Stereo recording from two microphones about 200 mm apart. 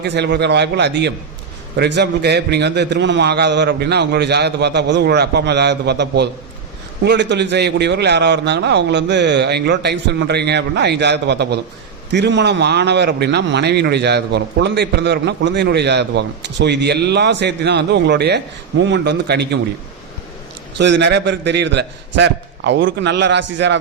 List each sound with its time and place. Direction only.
0.0 s a man's voice: 60° right (ahead or behind)
20.7 s a man's voice: 60° right (ahead or behind)